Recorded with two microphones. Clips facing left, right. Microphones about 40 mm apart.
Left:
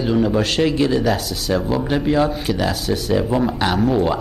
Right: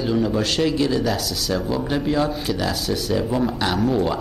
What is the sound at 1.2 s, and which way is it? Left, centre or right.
Speech, left.